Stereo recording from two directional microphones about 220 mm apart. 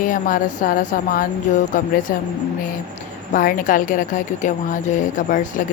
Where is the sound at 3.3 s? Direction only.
40° left (ahead or behind).